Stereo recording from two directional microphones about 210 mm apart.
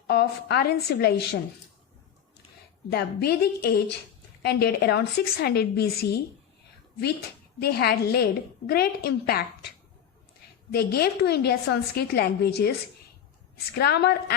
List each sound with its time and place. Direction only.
0.1 s a woman's voice: 50° left (ahead or behind)
2.9 s a woman's voice: 50° left (ahead or behind)
7.6 s a woman's voice: 50° left (ahead or behind)
10.7 s a woman's voice: 50° left (ahead or behind)
13.7 s a woman's voice: 50° left (ahead or behind)